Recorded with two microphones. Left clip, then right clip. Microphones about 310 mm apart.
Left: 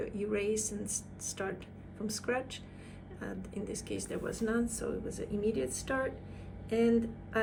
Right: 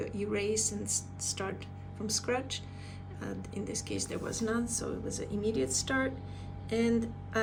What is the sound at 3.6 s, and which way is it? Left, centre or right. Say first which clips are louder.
Speech: right 2 dB; right.